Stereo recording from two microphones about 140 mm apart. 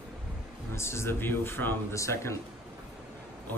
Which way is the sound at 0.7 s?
20° left (ahead or behind).